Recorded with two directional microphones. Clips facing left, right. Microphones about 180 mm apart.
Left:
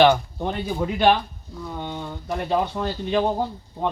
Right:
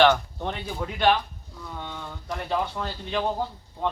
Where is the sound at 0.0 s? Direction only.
10° left (ahead or behind).